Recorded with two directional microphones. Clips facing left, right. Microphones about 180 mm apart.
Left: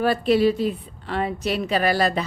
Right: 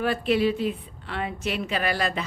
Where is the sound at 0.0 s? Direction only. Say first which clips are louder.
Left 4 dB; 35° left (ahead or behind).